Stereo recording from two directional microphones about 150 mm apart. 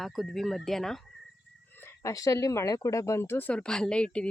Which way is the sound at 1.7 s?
20° left (ahead or behind).